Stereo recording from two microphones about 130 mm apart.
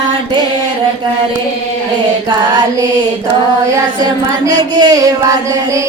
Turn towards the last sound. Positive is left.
turn(degrees=-25)  # may be behind; listen again after turning